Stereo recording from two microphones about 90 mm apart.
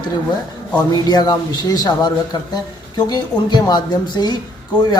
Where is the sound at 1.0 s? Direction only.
45° left (ahead or behind).